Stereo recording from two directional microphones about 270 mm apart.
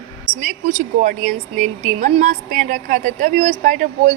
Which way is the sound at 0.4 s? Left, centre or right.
Right.